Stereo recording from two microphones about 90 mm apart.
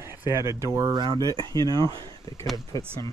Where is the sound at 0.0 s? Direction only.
25° right (ahead or behind).